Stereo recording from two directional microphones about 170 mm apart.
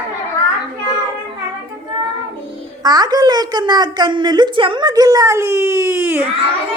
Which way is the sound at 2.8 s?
25° right (ahead or behind).